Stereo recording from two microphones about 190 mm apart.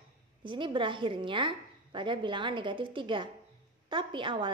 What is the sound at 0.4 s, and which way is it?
A woman's voice, 25° right (ahead or behind).